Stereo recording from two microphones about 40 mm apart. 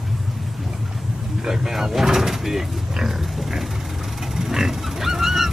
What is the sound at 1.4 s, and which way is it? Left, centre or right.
Speech, centre.